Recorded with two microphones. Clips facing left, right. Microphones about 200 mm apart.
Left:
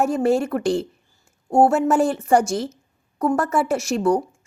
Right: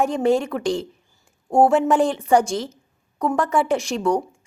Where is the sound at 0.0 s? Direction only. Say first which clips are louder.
Even; 5° left (ahead or behind).